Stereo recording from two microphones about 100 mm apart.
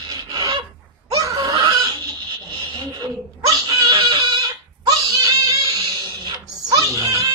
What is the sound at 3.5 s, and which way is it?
Screaming, 45° right (ahead or behind).